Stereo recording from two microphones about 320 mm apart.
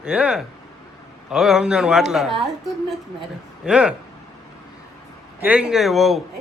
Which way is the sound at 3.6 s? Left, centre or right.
Centre.